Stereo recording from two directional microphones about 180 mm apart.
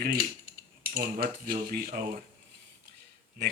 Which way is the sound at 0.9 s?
50° right (ahead or behind).